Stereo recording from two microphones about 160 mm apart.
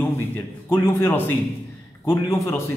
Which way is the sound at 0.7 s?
15° left (ahead or behind).